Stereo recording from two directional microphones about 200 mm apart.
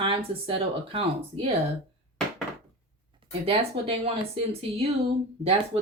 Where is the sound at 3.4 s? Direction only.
30° right (ahead or behind).